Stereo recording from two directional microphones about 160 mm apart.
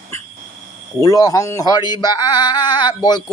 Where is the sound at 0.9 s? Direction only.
20° left (ahead or behind).